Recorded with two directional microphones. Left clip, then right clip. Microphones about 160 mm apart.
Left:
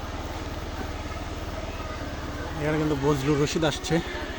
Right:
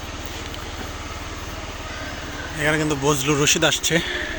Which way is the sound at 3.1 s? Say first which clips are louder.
Right 7 dB; 5° left (ahead or behind).